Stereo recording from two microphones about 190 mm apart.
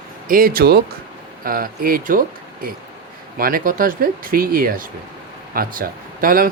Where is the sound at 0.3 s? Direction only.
50° right (ahead or behind).